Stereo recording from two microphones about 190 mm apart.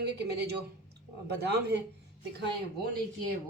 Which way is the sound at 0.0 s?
60° right (ahead or behind).